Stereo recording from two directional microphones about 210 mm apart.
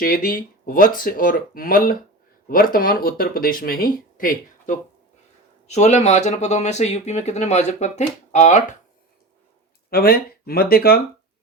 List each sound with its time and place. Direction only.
0.0 s speech: 45° left (ahead or behind)
9.9 s speech: 45° left (ahead or behind)